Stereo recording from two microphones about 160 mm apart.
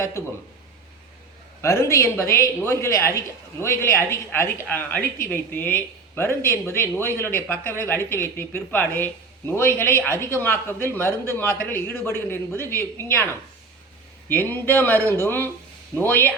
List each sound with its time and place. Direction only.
1.6 s a woman's voice: 15° left (ahead or behind)
14.3 s a woman's voice: 10° left (ahead or behind)